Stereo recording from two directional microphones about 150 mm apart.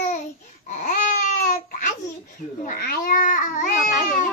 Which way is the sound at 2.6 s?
75° left (ahead or behind).